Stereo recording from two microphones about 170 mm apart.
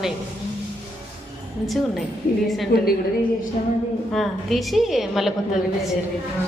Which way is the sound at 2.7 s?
65° left (ahead or behind).